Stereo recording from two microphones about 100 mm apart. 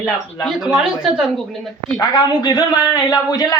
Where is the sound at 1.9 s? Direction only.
45° left (ahead or behind).